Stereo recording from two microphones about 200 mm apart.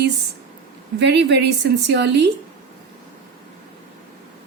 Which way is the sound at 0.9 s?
60° right (ahead or behind).